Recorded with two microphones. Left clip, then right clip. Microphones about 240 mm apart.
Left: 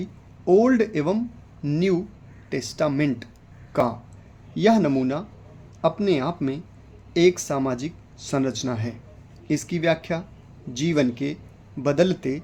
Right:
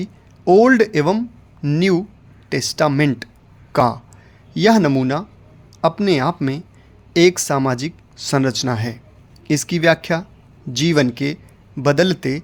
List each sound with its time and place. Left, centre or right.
0.0 s speech: right